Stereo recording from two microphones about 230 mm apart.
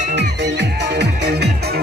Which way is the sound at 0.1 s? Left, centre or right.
Right.